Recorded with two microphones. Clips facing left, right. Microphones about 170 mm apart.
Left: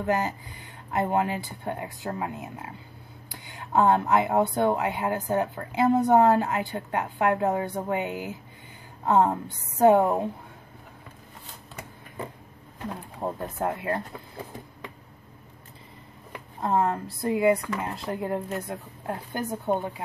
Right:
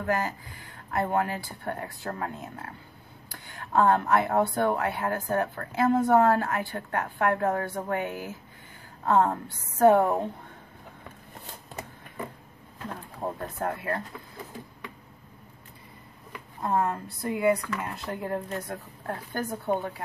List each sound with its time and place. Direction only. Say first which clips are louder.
0.0 s a woman's voice: left 2 dB; 20° left (ahead or behind)
12.8 s speech: left 2 dB; 15° left (ahead or behind)
16.6 s a woman's voice: left 2 dB; 20° left (ahead or behind)